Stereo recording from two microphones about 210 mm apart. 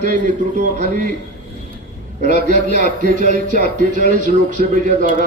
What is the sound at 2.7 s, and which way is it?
Speech, 40° right (ahead or behind).